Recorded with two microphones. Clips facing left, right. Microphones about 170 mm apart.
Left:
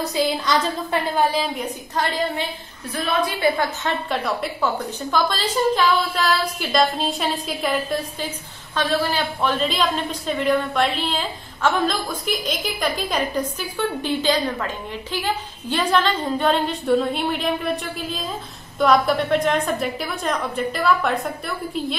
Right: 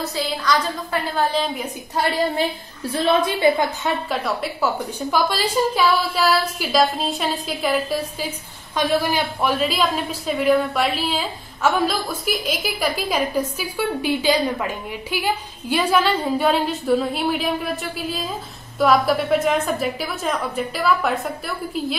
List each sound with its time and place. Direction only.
0.1 s a woman's voice: 20° left (ahead or behind)
2.9 s a woman's voice: 25° right (ahead or behind)
3.5 s a woman's voice: 10° right (ahead or behind)